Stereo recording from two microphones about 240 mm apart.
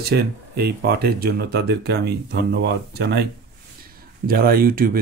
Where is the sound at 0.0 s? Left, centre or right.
Right.